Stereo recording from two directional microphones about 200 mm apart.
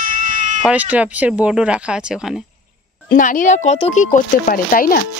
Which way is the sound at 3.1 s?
40° left (ahead or behind).